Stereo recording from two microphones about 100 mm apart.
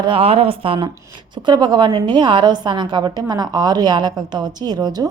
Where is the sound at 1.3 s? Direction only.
50° right (ahead or behind).